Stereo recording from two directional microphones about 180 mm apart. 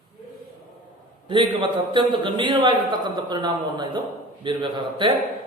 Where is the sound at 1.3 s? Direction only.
30° right (ahead or behind).